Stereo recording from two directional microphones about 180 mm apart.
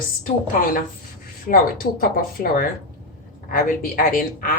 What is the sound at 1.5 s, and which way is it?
A woman's voice, 55° left (ahead or behind).